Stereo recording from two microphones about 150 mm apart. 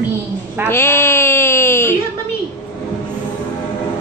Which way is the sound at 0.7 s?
15° left (ahead or behind).